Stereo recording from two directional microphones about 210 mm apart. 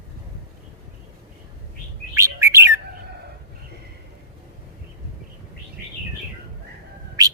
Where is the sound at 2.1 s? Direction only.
15° right (ahead or behind).